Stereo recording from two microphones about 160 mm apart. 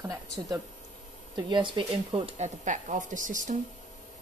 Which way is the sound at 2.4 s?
50° right (ahead or behind).